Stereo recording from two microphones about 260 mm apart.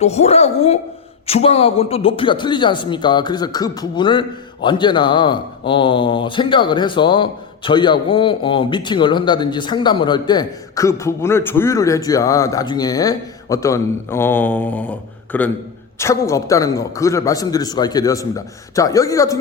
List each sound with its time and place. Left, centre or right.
0.0 s a woman's voice: left